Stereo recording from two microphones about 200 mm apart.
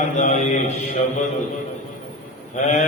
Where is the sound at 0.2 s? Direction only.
35° left (ahead or behind).